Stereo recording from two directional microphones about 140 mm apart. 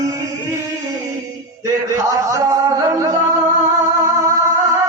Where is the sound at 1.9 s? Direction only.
25° right (ahead or behind).